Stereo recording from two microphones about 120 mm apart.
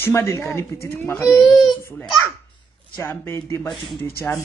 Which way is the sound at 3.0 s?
25° left (ahead or behind).